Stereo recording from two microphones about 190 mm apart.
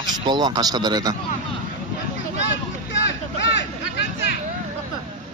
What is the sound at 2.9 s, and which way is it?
Vehicle, 70° left (ahead or behind).